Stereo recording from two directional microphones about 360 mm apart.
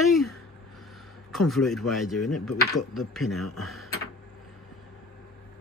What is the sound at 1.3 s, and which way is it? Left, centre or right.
Speech, centre.